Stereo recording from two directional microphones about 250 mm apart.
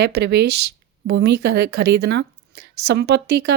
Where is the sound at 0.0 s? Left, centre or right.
Right.